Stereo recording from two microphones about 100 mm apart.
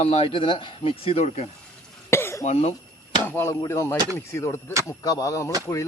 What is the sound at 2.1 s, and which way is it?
Cough, 25° left (ahead or behind).